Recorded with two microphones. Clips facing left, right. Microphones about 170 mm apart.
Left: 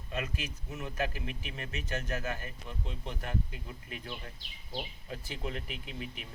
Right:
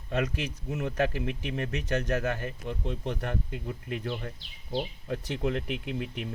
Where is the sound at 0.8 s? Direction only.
70° right (ahead or behind).